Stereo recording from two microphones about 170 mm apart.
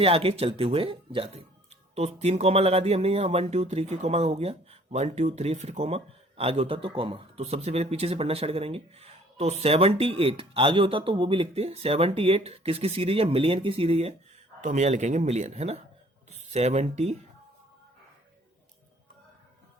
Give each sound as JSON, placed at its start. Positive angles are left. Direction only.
{"t": 0.0, "sound": "speech", "side_deg": -35}